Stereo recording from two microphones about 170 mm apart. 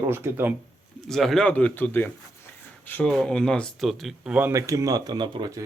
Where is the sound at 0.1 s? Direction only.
15° right (ahead or behind).